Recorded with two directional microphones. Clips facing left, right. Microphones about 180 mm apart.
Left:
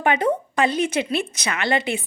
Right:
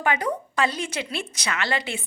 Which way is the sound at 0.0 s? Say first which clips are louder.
Left 5 dB; 25° left (ahead or behind).